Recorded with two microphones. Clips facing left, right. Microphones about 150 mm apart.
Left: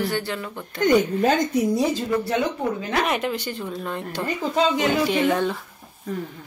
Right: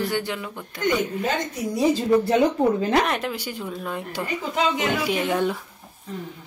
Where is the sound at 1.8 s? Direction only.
20° right (ahead or behind).